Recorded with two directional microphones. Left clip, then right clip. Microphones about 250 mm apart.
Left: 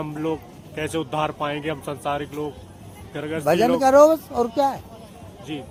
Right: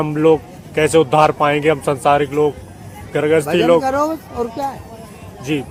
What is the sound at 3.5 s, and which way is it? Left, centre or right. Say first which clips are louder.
Speech: right 4 dB; left.